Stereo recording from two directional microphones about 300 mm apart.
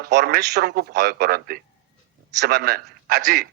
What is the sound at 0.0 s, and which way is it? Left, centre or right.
A man's voice, right.